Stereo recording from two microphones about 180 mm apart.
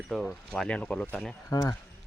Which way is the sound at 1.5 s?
20° left (ahead or behind).